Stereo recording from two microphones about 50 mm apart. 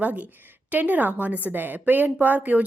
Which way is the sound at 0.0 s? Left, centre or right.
Right.